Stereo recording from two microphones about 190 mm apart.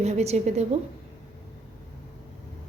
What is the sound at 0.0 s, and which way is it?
Speech, 35° right (ahead or behind).